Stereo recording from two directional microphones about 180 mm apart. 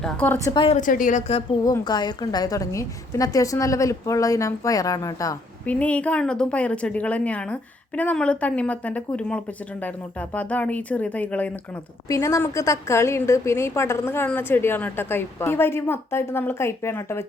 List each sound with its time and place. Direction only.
0.0 s a woman's voice: 10° left (ahead or behind)
0.8 s a woman's voice: 45° left (ahead or behind)
1.6 s a woman's voice: 20° left (ahead or behind)
5.6 s a woman's voice: 10° left (ahead or behind)